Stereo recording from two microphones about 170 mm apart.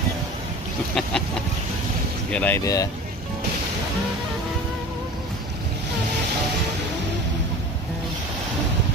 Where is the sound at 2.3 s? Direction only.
10° left (ahead or behind).